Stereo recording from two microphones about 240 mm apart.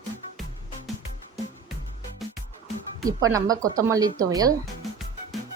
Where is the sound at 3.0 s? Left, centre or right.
Centre.